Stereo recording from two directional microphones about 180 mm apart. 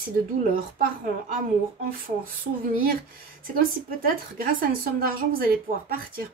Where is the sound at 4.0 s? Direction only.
55° right (ahead or behind).